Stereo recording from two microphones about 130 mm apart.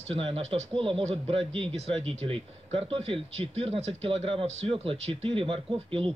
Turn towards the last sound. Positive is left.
turn(degrees=-45)  # may be behind; listen again after turning